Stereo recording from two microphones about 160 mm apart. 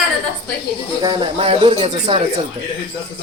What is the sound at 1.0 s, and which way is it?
A man's voice, 25° right (ahead or behind).